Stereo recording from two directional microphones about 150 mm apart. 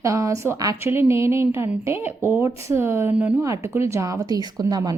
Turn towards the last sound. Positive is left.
turn(degrees=-25)  # may be behind; listen again after turning